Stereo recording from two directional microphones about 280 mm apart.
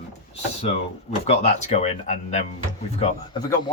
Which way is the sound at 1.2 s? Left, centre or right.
Left.